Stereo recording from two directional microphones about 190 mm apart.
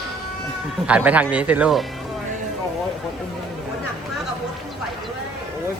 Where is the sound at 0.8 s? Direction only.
5° right (ahead or behind).